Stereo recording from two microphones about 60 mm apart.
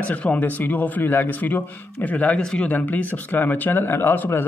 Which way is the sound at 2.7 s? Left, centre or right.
Left.